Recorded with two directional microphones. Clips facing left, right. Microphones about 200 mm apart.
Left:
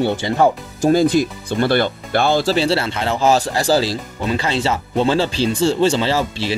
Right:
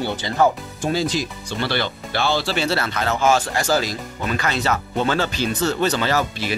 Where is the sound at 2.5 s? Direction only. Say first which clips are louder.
Left 5 dB; 30° left (ahead or behind).